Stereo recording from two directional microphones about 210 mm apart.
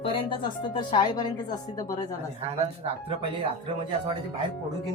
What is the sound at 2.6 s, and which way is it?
Speech, 25° right (ahead or behind).